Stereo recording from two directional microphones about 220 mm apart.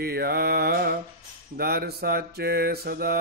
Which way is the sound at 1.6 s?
45° right (ahead or behind).